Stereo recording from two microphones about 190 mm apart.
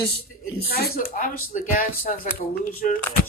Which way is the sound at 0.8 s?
50° left (ahead or behind).